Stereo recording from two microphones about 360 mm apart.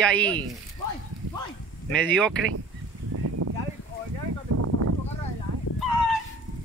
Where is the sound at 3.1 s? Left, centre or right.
Right.